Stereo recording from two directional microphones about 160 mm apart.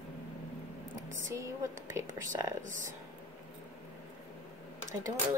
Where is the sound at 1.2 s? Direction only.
20° right (ahead or behind).